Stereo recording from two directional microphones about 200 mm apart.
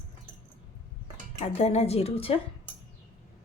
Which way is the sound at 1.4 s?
35° left (ahead or behind).